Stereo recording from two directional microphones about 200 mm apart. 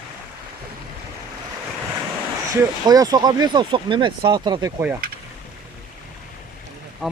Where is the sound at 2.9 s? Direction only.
20° right (ahead or behind).